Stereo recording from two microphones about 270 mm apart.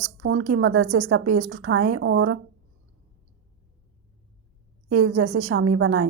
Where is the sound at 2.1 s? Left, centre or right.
Right.